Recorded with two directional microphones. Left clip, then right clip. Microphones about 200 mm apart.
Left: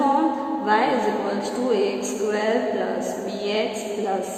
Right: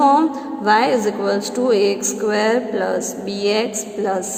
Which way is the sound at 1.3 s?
40° right (ahead or behind).